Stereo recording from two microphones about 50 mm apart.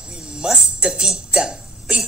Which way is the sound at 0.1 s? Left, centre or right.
Centre.